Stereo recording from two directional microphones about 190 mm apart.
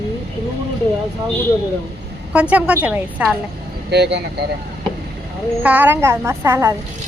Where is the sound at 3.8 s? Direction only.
60° right (ahead or behind).